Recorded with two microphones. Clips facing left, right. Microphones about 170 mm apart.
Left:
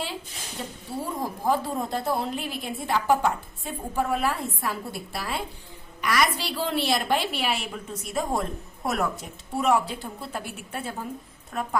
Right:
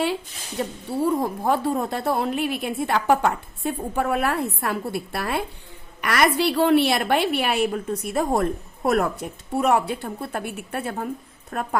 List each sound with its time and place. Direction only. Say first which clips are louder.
0.6 s a woman's voice: right 9 dB; 65° right (ahead or behind)
11.5 s a woman's voice: right 2 dB; 50° right (ahead or behind)